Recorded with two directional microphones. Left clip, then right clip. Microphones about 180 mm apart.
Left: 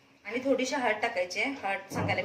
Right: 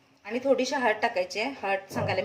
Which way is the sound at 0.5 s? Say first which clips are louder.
Right 3 dB; 60° right (ahead or behind).